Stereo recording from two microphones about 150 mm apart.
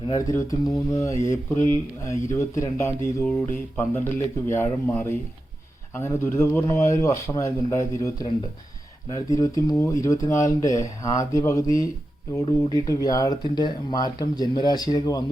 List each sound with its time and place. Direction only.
0.1 s speech: 20° left (ahead or behind)